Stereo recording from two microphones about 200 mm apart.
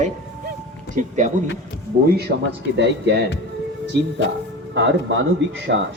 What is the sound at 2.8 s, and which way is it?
Speech, 60° right (ahead or behind).